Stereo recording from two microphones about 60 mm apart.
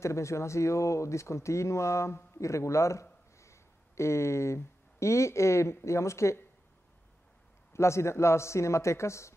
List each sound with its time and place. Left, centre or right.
0.0 s speech: left
7.7 s speech: left